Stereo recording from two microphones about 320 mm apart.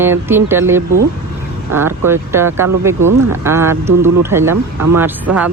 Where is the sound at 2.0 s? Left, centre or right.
Centre.